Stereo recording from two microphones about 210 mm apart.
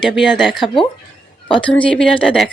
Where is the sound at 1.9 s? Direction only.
5° left (ahead or behind).